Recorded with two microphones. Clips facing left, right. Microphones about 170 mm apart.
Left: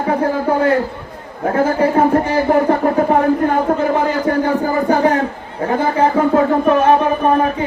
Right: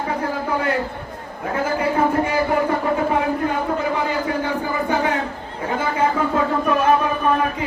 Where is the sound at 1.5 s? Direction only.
50° left (ahead or behind).